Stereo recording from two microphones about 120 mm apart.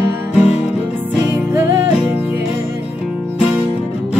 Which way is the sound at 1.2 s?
25° right (ahead or behind).